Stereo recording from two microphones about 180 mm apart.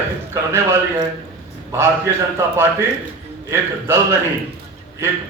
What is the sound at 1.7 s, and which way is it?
A man's voice, 15° right (ahead or behind).